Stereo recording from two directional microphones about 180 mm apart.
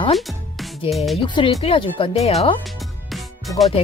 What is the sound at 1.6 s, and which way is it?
Speech, 30° left (ahead or behind).